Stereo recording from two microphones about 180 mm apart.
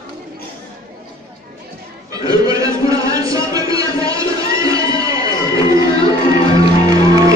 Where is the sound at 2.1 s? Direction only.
20° right (ahead or behind).